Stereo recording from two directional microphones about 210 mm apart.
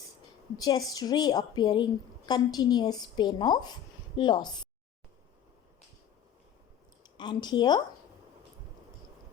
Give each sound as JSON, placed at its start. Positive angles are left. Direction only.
{"t": 0.5, "sound": "a woman's voice", "side_deg": 20}
{"t": 7.2, "sound": "a woman's voice", "side_deg": 20}